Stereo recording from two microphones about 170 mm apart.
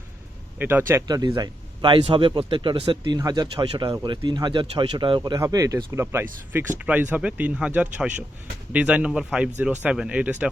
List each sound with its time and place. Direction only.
0.6 s speech: 10° right (ahead or behind)